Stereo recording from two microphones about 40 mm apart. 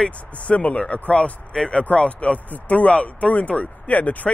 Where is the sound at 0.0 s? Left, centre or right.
Left.